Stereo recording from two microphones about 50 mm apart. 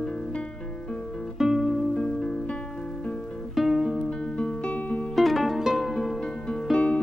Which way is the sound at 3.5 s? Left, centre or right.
Centre.